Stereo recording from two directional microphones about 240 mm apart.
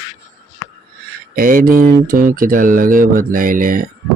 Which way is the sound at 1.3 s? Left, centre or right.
Right.